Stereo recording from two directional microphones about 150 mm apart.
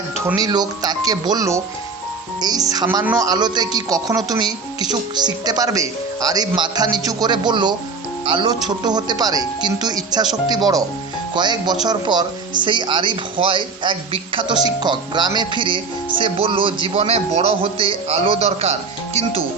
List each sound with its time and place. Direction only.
0.3 s speech: 25° right (ahead or behind); by 19.2 s 45° right (ahead or behind)